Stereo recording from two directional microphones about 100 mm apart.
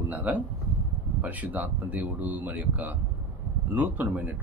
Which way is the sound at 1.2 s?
15° right (ahead or behind).